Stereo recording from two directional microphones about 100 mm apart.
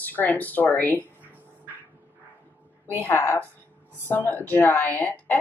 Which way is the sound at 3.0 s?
25° left (ahead or behind).